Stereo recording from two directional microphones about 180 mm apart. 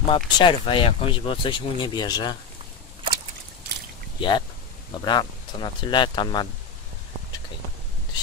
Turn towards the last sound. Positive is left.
turn(degrees=25)  # may be behind; listen again after turning